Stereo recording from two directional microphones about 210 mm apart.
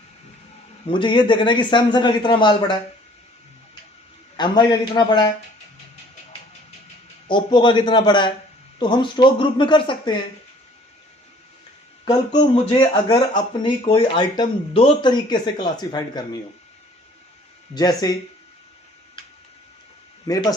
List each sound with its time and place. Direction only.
0.9 s speech: 20° left (ahead or behind)
4.4 s speech: 20° left (ahead or behind)
7.3 s speech: 20° left (ahead or behind)
12.0 s speech: 20° left (ahead or behind)
17.7 s speech: 20° left (ahead or behind)
20.2 s speech: 15° left (ahead or behind)